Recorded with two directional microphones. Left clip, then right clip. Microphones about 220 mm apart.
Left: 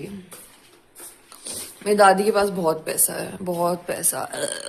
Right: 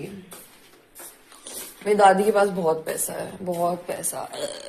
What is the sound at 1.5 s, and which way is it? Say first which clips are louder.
Speech: left 1 dB; 20° left (ahead or behind).